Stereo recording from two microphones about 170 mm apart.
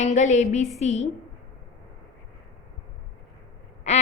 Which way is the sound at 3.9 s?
45° left (ahead or behind).